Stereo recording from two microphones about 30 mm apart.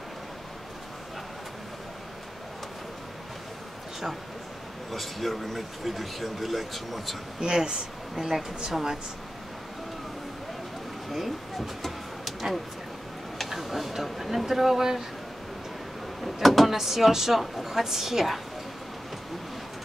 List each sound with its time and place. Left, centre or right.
4.9 s speech: centre
7.3 s a woman's voice: right
11.1 s a sound: centre
13.5 s speech: centre
16.3 s a sound: centre
16.7 s a woman's voice: centre